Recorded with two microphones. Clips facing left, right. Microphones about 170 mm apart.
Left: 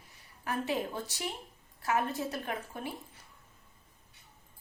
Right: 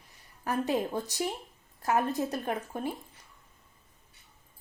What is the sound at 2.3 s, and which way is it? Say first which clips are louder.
Speech: right 4 dB; 40° right (ahead or behind).